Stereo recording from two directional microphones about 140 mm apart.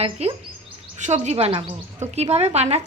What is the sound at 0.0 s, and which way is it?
Speech, 45° right (ahead or behind).